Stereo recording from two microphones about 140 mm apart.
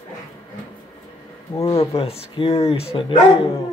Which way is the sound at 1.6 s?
45° left (ahead or behind).